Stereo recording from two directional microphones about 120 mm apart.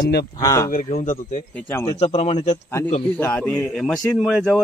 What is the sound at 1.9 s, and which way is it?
Speech, 55° left (ahead or behind).